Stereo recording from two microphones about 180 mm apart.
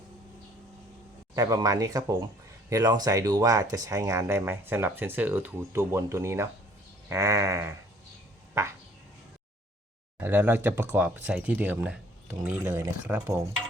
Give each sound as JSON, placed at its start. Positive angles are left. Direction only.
{"t": 1.4, "sound": "speech", "side_deg": -20}
{"t": 10.2, "sound": "speech", "side_deg": -10}
{"t": 13.1, "sound": "stir", "side_deg": -5}